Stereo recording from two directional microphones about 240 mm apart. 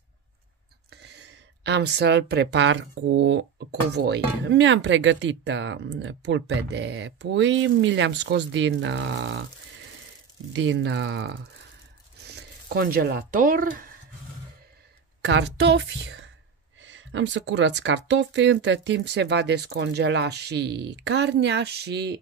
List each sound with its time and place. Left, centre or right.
0.8 s speech: right
10.5 s speech: right
15.2 s speech: right